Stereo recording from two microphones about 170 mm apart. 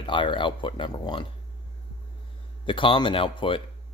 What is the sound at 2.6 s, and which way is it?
Speech, 30° left (ahead or behind).